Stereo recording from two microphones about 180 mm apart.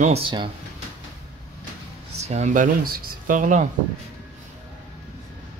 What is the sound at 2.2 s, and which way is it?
Speech, 40° right (ahead or behind).